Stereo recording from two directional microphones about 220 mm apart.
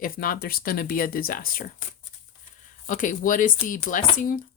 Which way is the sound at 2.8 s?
35° left (ahead or behind).